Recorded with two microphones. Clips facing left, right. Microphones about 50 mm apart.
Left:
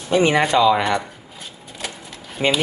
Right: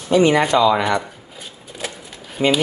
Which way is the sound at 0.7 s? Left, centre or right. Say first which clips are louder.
Right 1 dB; centre.